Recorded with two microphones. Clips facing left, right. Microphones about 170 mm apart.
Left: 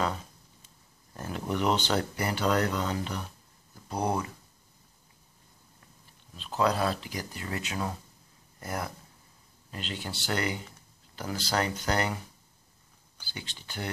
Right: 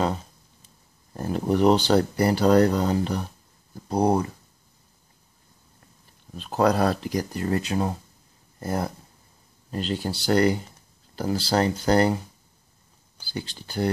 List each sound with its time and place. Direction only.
0.0 s a sound: 30° right (ahead or behind)
1.1 s speech: 35° right (ahead or behind)
6.3 s speech: 45° right (ahead or behind)
13.2 s speech: 35° right (ahead or behind)